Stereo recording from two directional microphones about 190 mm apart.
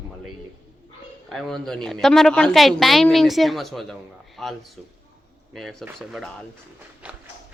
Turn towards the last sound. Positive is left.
turn(degrees=-5)  # may be behind; listen again after turning